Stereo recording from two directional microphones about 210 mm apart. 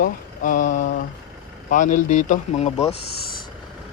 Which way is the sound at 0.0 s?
40° left (ahead or behind).